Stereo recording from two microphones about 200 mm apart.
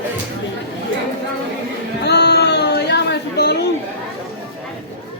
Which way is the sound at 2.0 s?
55° left (ahead or behind).